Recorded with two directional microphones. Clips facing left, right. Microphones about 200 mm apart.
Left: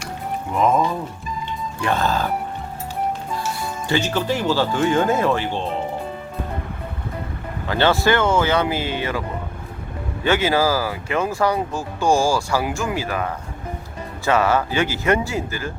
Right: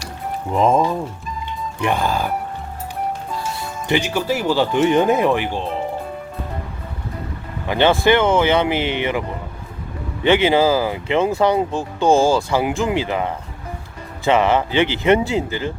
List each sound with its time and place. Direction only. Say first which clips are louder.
0.5 s speech: right 2 dB; 30° right (ahead or behind)
1.8 s speech: right 1 dB; 15° right (ahead or behind)
3.8 s speech: right 2 dB; 15° right (ahead or behind)
7.7 s speech: right 3 dB; 15° right (ahead or behind)
10.2 s speech: right 4 dB; 20° right (ahead or behind)